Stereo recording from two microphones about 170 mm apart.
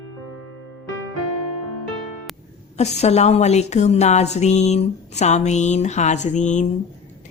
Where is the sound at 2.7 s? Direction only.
40° left (ahead or behind).